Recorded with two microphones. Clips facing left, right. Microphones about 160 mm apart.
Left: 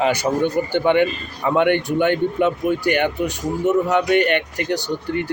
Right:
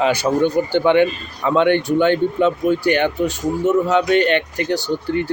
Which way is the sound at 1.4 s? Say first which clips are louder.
Right 2 dB; 15° left (ahead or behind).